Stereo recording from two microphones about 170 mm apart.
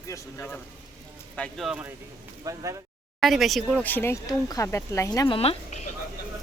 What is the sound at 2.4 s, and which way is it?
Speech, 20° right (ahead or behind).